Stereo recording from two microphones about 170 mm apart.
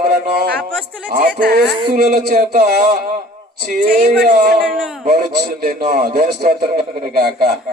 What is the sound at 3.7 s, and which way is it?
Speech, 60° right (ahead or behind).